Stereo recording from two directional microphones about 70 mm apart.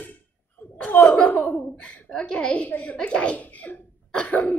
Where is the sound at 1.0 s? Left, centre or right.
Centre.